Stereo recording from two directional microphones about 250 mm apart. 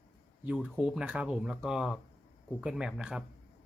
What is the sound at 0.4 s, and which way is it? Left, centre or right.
Speech, centre.